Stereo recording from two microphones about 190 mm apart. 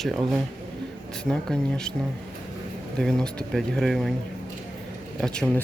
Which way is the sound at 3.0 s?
5° left (ahead or behind).